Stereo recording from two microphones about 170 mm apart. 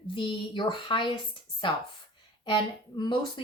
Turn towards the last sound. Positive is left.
turn(degrees=30)  # may be behind; listen again after turning